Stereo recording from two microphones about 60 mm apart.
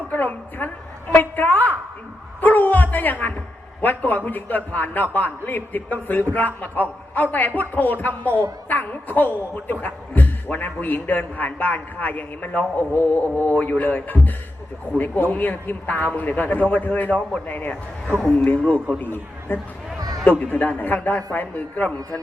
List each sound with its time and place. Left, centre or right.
0.1 s a woman's voice: left
2.4 s dog: left
3.8 s a man's voice: left
18.9 s a man's voice: left
20.0 s a sound: right
20.4 s a man's voice: left